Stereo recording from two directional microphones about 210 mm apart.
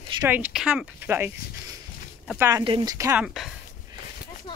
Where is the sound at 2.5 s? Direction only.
20° right (ahead or behind); by 3.5 s centre (ahead or behind).